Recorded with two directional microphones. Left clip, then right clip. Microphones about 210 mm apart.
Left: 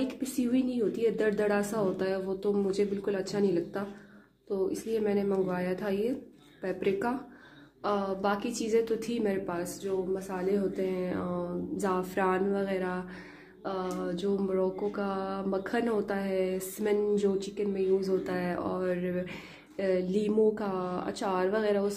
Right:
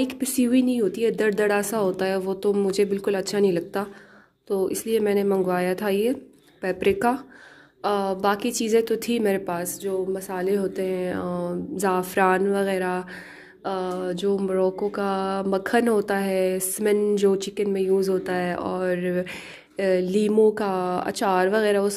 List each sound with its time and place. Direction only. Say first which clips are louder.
0.0 s speech: right 8 dB; 45° right (ahead or behind)